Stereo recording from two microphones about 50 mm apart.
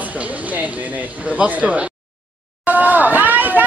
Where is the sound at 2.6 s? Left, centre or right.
Right.